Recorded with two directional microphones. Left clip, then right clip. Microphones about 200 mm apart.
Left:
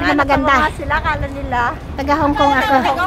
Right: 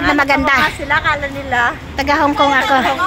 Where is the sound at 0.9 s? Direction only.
40° right (ahead or behind).